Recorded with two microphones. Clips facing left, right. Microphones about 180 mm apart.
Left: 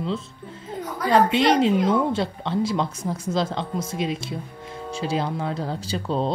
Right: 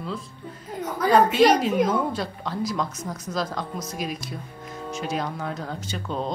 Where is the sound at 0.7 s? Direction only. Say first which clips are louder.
Right 1 dB; 25° left (ahead or behind).